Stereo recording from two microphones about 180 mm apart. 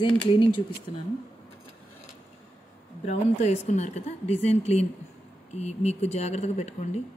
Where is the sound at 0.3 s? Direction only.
30° left (ahead or behind).